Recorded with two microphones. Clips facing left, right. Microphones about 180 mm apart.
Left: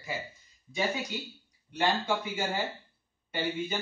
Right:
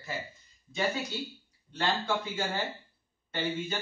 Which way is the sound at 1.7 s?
15° left (ahead or behind).